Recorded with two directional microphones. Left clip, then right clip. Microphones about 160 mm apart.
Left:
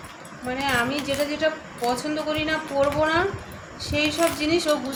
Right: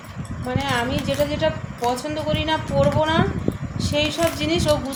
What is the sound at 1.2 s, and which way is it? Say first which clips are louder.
A woman's voice: right 3 dB; 30° right (ahead or behind).